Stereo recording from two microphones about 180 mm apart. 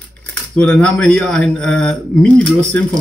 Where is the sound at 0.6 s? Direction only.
5° left (ahead or behind).